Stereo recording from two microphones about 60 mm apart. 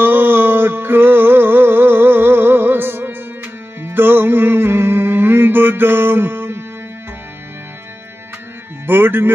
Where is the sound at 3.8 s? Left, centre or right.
Right.